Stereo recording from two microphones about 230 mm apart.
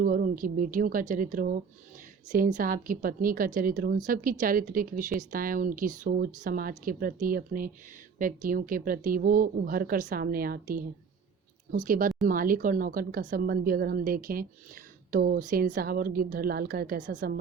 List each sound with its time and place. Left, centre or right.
0.0 s a woman's voice: right